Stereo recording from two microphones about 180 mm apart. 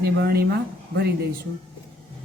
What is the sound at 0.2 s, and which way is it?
Speech, 60° right (ahead or behind).